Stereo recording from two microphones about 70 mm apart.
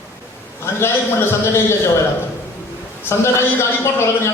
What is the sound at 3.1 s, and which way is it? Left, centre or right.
Speech, left.